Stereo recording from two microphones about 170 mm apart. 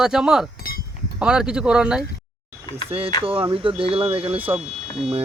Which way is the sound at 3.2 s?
30° right (ahead or behind).